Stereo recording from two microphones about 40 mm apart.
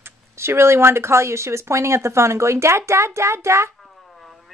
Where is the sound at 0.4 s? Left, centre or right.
Right.